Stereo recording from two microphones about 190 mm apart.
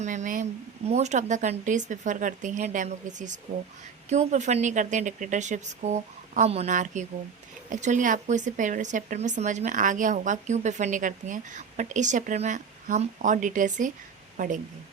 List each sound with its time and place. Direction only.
0.0 s speech: 40° right (ahead or behind)